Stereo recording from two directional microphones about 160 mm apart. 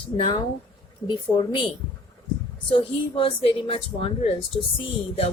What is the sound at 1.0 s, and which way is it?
Music, 30° left (ahead or behind).